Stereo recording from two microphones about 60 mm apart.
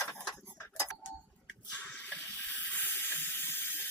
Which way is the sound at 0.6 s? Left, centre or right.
Left.